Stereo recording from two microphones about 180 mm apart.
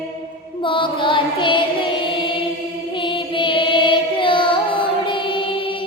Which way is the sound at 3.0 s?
25° left (ahead or behind).